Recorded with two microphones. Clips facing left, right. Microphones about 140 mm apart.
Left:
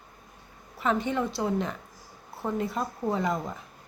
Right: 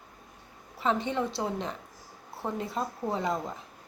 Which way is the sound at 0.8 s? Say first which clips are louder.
Left 1 dB; 25° right (ahead or behind).